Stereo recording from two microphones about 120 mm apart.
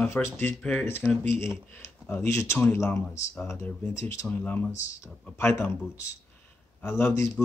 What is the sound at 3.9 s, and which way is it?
Speech, 25° left (ahead or behind).